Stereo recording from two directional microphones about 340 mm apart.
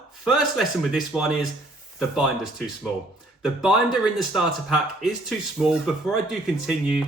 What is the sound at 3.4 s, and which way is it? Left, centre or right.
Speech, centre.